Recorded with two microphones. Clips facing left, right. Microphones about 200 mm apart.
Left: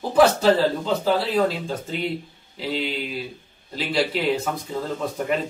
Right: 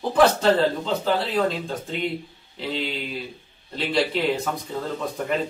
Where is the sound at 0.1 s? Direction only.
5° left (ahead or behind).